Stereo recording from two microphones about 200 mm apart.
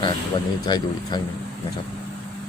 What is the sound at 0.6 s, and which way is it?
Speech, 20° left (ahead or behind).